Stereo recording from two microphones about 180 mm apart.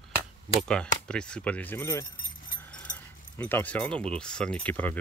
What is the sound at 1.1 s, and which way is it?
Speech, 5° left (ahead or behind).